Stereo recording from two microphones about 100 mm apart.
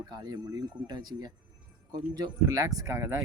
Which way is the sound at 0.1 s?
40° right (ahead or behind).